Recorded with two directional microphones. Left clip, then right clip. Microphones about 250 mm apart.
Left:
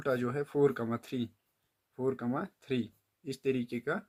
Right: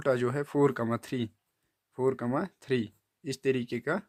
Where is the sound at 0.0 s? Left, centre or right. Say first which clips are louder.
Right 4 dB; right.